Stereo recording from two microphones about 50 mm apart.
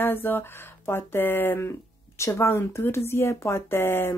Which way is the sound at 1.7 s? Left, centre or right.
Left.